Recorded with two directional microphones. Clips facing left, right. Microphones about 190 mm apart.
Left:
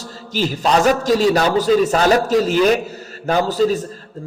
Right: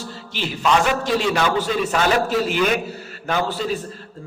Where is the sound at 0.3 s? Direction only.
40° left (ahead or behind).